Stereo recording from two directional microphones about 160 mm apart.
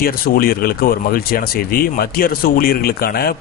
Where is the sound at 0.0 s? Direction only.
70° left (ahead or behind).